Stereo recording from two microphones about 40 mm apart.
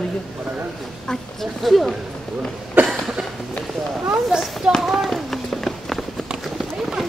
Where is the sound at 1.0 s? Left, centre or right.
Centre.